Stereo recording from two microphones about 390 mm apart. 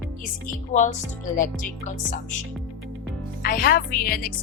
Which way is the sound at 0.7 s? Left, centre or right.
Centre.